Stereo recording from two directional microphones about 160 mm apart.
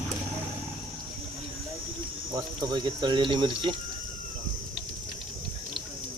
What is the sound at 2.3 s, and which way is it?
Speech, 25° right (ahead or behind).